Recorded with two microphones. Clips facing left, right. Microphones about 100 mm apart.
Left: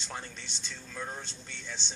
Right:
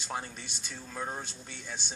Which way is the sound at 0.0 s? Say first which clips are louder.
Right 4 dB; 15° right (ahead or behind).